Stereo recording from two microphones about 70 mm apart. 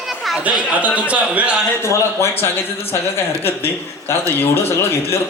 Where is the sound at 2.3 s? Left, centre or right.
Left.